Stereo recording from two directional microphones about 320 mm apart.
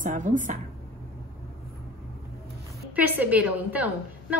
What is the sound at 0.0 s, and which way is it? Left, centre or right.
Speech, right.